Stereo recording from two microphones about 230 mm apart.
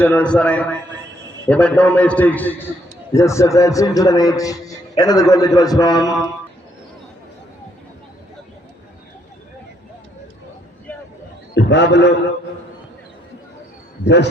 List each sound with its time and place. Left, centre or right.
0.0 s a man's voice: centre
11.5 s a man's voice: left
14.0 s a man's voice: left